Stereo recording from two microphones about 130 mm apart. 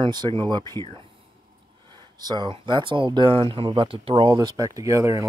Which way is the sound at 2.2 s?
35° right (ahead or behind).